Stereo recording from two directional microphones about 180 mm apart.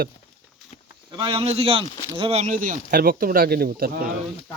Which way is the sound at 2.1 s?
30° right (ahead or behind).